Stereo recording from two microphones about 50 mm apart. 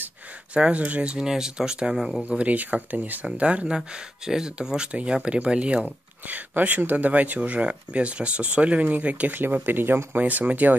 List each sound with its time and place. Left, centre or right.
0.6 s speech: right
1.1 s speech: centre
2.2 s speech: right
3.3 s speech: right